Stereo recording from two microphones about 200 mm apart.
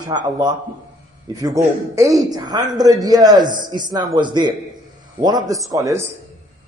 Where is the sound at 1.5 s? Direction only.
15° right (ahead or behind).